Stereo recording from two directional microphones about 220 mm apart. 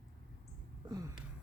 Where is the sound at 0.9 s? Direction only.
15° right (ahead or behind).